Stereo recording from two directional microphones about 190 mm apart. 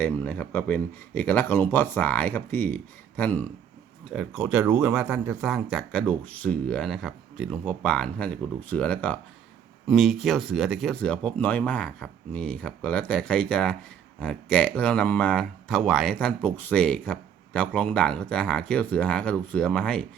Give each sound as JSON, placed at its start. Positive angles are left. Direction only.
{"t": 0.0, "sound": "speech", "side_deg": 10}
{"t": 4.1, "sound": "speech", "side_deg": -5}